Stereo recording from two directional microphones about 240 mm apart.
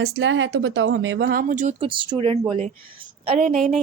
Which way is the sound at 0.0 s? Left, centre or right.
Right.